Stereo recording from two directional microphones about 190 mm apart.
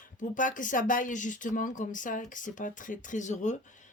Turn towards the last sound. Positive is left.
turn(degrees=40)  # may be behind; listen again after turning